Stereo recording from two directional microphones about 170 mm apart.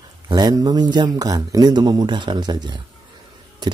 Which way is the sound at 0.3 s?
25° right (ahead or behind).